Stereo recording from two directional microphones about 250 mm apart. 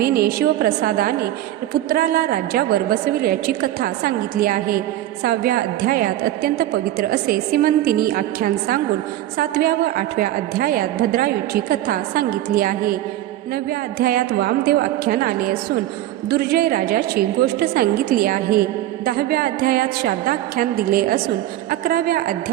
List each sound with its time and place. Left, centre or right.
0.0 s a woman's voice: right